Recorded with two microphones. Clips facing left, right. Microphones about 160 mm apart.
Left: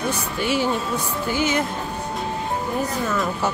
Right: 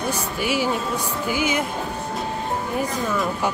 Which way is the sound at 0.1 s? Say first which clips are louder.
Left 1 dB; 10° right (ahead or behind).